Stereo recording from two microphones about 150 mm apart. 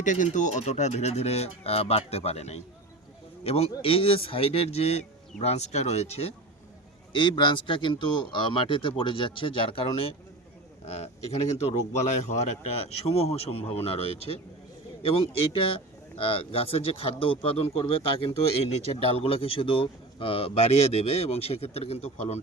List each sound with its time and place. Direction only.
0.0 s speech: 55° left (ahead or behind)
7.1 s speech: 30° left (ahead or behind)